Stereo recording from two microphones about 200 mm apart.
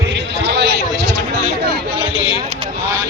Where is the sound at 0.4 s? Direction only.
60° right (ahead or behind).